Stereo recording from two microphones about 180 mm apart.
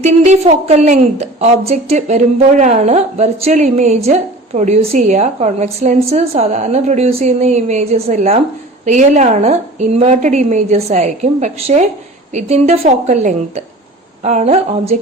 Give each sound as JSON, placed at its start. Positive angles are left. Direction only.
{"t": 0.0, "sound": "a woman's voice", "side_deg": -40}